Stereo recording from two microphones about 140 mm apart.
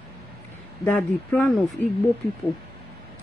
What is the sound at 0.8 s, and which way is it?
Speech, 10° left (ahead or behind).